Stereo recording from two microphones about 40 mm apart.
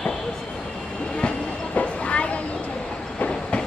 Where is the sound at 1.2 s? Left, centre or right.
Left.